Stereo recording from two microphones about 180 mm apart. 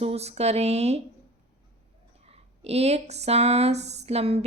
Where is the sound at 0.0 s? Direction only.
35° right (ahead or behind).